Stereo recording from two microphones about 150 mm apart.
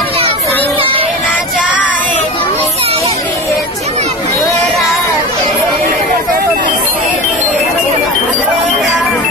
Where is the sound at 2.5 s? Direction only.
40° right (ahead or behind).